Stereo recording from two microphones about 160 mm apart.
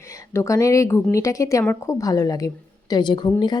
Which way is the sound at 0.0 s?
20° left (ahead or behind).